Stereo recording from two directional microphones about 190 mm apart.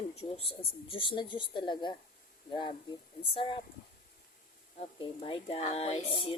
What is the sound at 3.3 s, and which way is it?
Speech, 25° left (ahead or behind).